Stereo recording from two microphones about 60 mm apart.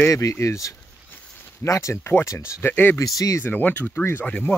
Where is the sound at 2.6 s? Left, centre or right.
Left.